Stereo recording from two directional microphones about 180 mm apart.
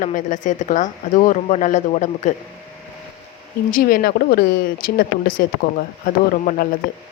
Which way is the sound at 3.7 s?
55° left (ahead or behind).